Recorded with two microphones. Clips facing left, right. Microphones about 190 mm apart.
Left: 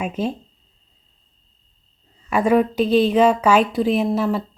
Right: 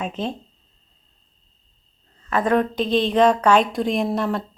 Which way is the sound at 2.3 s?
10° left (ahead or behind).